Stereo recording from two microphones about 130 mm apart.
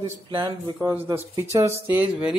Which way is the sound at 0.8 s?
20° right (ahead or behind).